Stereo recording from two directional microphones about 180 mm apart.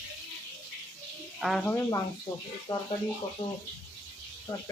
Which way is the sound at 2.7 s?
25° left (ahead or behind).